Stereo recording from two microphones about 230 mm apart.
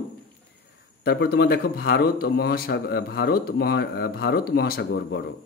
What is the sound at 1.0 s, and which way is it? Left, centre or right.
Speech, left.